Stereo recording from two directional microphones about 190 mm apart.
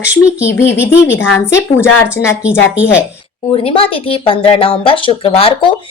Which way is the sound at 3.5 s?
30° left (ahead or behind).